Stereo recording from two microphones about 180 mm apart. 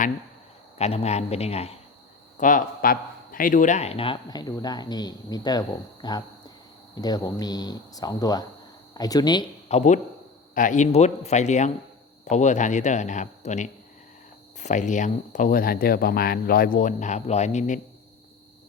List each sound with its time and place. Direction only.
0.8 s a man's voice: 35° left (ahead or behind)
2.4 s a man's voice: 45° left (ahead or behind); by 9.5 s 25° left (ahead or behind)
9.6 s a man's voice: 40° left (ahead or behind)